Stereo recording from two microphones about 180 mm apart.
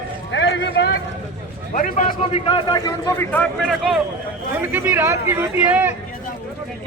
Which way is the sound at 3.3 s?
Centre (ahead or behind).